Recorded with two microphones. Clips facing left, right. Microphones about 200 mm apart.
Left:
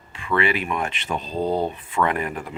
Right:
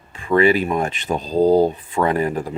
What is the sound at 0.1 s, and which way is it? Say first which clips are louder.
Speech: right 7 dB; 40° right (ahead or behind).